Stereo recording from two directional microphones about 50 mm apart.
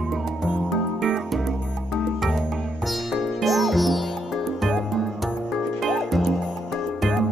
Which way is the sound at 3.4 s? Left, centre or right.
Centre.